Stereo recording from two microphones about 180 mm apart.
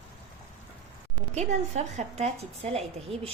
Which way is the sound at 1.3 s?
40° right (ahead or behind).